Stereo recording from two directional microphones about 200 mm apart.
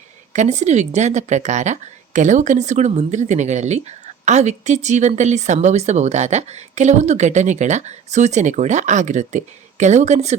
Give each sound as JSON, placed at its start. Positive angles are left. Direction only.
{"t": 0.3, "sound": "speech", "side_deg": -35}